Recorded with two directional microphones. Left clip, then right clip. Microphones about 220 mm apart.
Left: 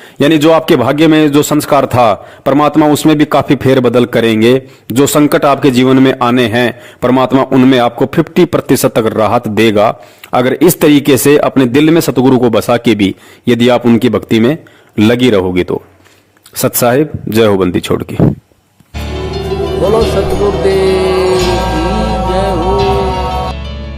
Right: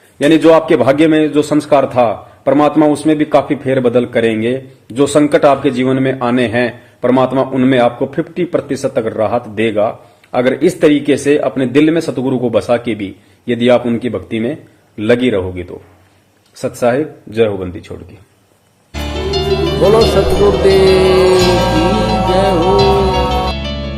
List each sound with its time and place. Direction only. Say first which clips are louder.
0.2 s a man's voice: left 1 dB; 45° left (ahead or behind)
18.9 s music: right 2 dB; centre (ahead or behind)